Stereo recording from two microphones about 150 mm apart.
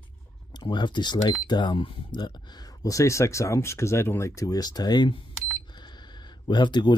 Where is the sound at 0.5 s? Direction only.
30° left (ahead or behind).